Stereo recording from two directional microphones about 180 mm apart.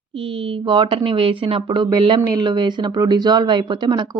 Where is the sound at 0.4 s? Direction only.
25° right (ahead or behind).